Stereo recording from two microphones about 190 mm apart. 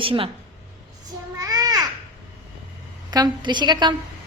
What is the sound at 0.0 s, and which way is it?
Speech, 30° right (ahead or behind).